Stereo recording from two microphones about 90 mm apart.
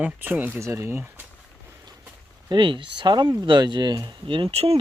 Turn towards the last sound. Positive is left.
turn(degrees=-75)  # may be behind; listen again after turning